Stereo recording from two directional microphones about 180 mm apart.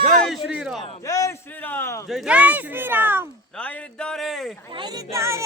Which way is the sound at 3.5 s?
5° left (ahead or behind).